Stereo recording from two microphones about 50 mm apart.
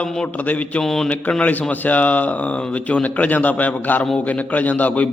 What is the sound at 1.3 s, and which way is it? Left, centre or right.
A man's voice, left.